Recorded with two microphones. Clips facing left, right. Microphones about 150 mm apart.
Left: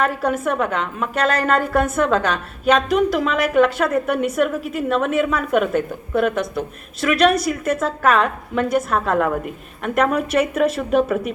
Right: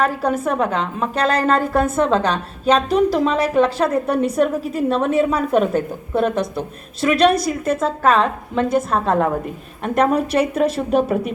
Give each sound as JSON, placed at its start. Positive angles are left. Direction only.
{"t": 0.0, "sound": "a woman's voice", "side_deg": -30}